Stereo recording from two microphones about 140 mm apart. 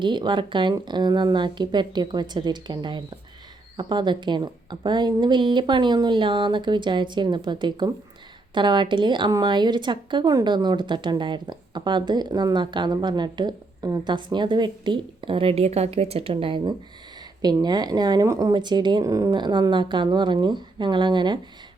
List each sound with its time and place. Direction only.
0.0 s a woman's voice: 35° right (ahead or behind)